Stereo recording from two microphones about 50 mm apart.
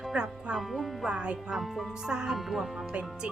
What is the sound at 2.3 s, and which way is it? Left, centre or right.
Speech, centre.